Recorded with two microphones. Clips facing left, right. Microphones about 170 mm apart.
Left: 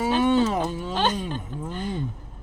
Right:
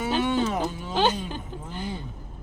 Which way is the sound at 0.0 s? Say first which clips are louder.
Left 4 dB; 35° left (ahead or behind).